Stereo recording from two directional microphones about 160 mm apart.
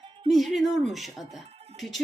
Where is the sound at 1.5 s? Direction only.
40° right (ahead or behind).